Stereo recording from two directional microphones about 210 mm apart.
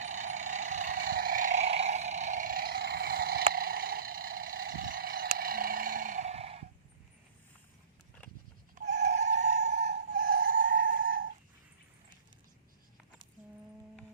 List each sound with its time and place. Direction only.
0.0 s a sound: 35° right (ahead or behind)
3.5 s vehicle: 45° right (ahead or behind); by 6.7 s 30° right (ahead or behind)
8.7 s vehicle: 35° right (ahead or behind)